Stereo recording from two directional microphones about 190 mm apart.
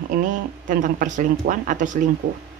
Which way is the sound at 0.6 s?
40° right (ahead or behind).